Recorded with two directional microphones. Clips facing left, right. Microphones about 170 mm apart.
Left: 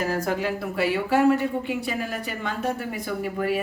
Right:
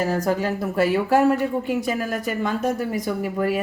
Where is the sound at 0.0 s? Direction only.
35° right (ahead or behind).